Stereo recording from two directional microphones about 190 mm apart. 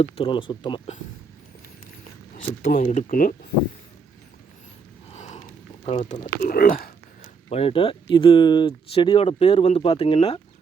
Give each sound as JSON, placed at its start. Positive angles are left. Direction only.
{"t": 0.0, "sound": "speech", "side_deg": 30}
{"t": 2.5, "sound": "speech", "side_deg": 50}
{"t": 5.1, "sound": "a sound", "side_deg": 40}
{"t": 6.1, "sound": "speech", "side_deg": 20}
{"t": 6.4, "sound": "speech", "side_deg": 50}
{"t": 7.5, "sound": "speech", "side_deg": 30}